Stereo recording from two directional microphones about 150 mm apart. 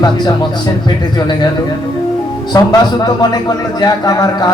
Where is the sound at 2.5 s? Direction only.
25° left (ahead or behind).